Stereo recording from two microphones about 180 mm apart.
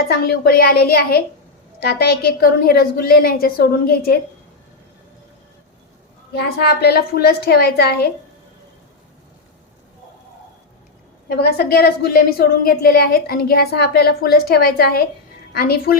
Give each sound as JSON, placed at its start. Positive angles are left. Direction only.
{"t": 0.1, "sound": "a woman's voice", "side_deg": 60}
{"t": 6.3, "sound": "a woman's voice", "side_deg": 65}
{"t": 11.3, "sound": "a woman's voice", "side_deg": 60}